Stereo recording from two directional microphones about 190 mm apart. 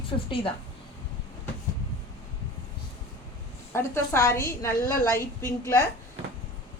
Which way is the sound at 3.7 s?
15° left (ahead or behind).